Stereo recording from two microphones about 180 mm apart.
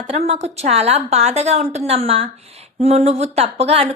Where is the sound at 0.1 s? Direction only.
35° right (ahead or behind).